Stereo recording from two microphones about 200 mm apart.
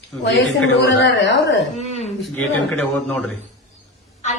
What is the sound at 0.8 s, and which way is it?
Speech, 60° left (ahead or behind).